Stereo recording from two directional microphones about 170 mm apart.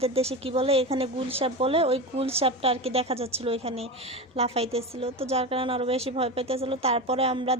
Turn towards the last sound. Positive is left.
turn(degrees=-35)  # may be behind; listen again after turning